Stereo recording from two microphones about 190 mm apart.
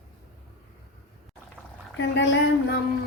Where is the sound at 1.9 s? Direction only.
70° left (ahead or behind).